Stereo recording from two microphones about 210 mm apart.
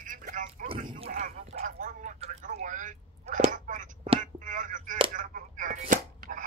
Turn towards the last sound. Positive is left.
turn(degrees=-40)  # may be behind; listen again after turning